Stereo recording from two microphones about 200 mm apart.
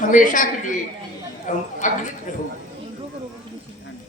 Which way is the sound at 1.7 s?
40° left (ahead or behind).